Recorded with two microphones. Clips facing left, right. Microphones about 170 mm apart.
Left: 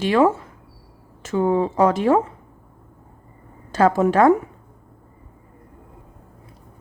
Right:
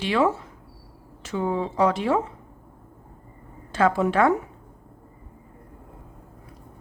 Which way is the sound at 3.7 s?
40° left (ahead or behind).